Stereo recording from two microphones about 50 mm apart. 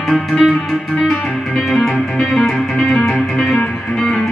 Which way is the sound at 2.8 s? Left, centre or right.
Left.